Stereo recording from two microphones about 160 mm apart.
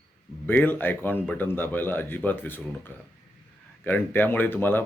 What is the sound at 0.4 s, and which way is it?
Speech, 10° left (ahead or behind).